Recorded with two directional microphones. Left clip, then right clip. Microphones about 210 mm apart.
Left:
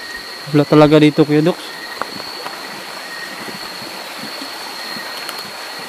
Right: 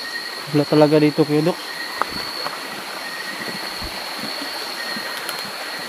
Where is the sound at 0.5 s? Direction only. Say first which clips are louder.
Left 5 dB; 40° left (ahead or behind).